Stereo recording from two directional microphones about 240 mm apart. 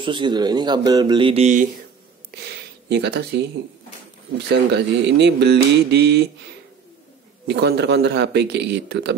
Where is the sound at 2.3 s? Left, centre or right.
Right.